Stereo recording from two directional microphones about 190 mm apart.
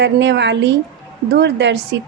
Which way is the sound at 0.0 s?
65° right (ahead or behind).